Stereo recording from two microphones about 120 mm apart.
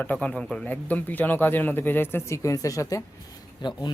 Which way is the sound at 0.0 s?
10° left (ahead or behind).